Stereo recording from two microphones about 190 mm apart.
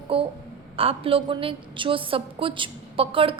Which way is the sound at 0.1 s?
30° right (ahead or behind).